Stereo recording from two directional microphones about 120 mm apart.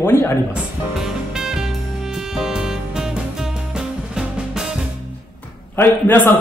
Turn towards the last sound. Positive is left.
turn(degrees=15)  # may be behind; listen again after turning